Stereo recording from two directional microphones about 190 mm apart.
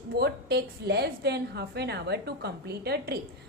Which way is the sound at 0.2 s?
60° right (ahead or behind).